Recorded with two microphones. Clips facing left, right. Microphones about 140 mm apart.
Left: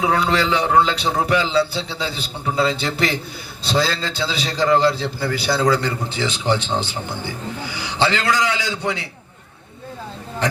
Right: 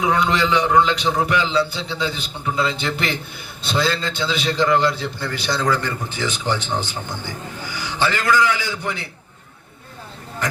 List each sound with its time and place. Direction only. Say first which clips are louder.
0.0 s a man's voice: even; 30° left (ahead or behind)
5.5 s a man's voice: left 2 dB; 15° left (ahead or behind)